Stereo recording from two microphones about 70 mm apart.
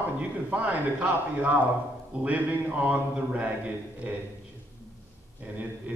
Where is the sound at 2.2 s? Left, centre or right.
Right.